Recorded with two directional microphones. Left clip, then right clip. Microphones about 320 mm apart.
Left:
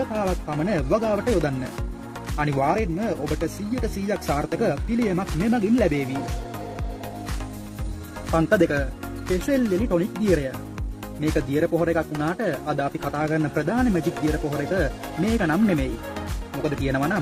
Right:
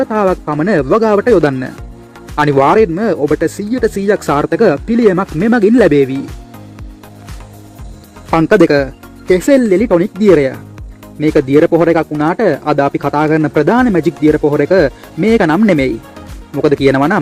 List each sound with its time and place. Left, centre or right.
0.1 s speech: right
8.3 s speech: centre